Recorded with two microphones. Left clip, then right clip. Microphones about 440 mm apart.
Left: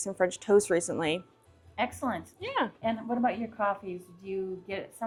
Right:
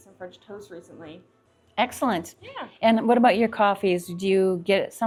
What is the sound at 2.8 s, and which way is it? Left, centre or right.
Speech, right.